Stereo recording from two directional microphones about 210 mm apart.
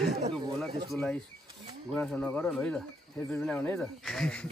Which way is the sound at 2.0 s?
10° left (ahead or behind).